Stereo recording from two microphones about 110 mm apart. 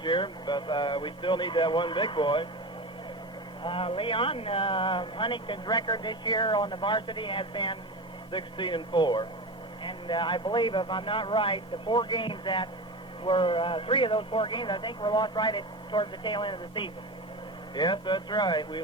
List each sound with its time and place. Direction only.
0.0 s speech: 45° left (ahead or behind)
3.6 s speech: 50° left (ahead or behind)